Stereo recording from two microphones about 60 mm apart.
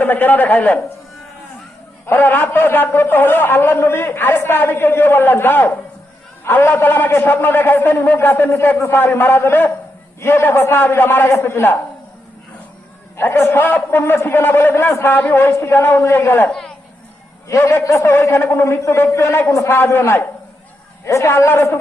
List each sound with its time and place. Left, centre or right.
0.0 s a man's voice: left
2.0 s a man's voice: left
6.4 s a man's voice: left
13.1 s a man's voice: left
15.4 s a man's voice: left
16.5 s speech: centre
17.5 s a man's voice: left
17.8 s a man's voice: left
18.1 s a man's voice: left
21.0 s a man's voice: left
21.3 s a man's voice: left